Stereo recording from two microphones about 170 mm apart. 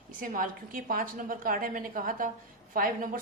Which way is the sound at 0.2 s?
50° right (ahead or behind).